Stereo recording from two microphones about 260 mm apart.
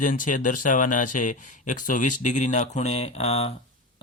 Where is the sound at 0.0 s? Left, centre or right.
Left.